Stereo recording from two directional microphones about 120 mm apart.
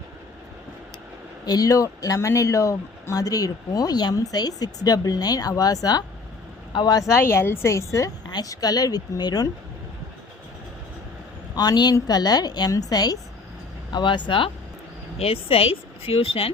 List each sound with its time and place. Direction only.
1.5 s speech: 30° left (ahead or behind)
11.5 s speech: 35° left (ahead or behind); by 16.5 s 50° left (ahead or behind)